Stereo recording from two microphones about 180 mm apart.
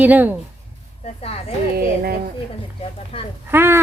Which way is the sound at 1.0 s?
35° left (ahead or behind).